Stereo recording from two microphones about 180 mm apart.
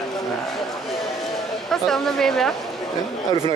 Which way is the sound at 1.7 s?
Centre (ahead or behind).